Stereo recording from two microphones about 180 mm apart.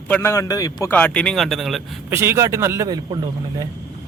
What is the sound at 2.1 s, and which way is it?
Speech, 15° right (ahead or behind).